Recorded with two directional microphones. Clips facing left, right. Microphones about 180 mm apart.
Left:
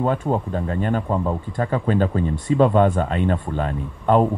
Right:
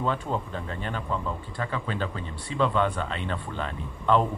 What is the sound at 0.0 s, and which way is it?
Speech, 45° left (ahead or behind).